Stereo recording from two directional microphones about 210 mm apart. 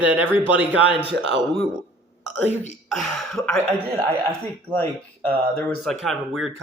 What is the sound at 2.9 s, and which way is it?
Speech, centre (ahead or behind).